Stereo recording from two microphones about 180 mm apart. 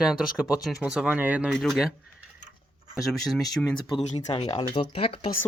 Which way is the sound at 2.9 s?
Centre (ahead or behind).